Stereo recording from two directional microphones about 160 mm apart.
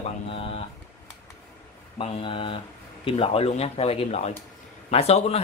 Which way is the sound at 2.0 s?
35° left (ahead or behind).